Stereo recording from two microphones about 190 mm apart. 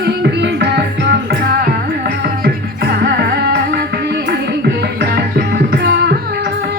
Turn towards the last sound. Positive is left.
turn(degrees=-60)  # may be behind; listen again after turning